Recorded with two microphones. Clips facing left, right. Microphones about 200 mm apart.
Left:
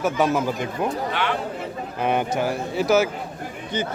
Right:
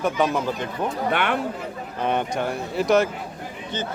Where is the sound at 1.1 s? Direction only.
55° right (ahead or behind).